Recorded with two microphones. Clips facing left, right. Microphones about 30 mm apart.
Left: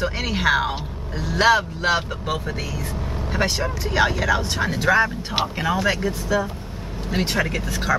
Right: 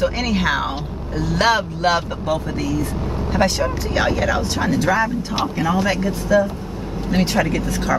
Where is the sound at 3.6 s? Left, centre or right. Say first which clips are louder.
Right 1 dB; centre.